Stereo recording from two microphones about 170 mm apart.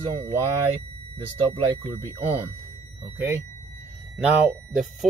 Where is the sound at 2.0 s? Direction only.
15° right (ahead or behind).